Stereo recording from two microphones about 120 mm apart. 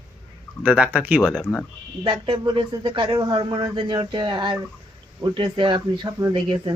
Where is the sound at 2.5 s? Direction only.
45° right (ahead or behind).